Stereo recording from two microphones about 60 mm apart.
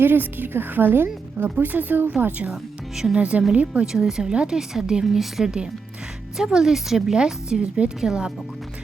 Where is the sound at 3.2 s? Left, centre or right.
Right.